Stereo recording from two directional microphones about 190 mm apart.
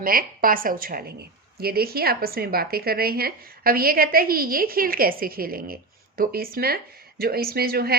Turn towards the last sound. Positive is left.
turn(degrees=-55)  # may be behind; listen again after turning